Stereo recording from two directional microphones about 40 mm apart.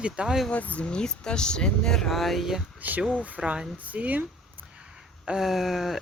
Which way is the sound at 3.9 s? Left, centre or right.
Right.